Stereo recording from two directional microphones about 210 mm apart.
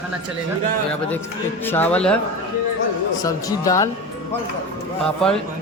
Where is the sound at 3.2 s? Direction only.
15° left (ahead or behind).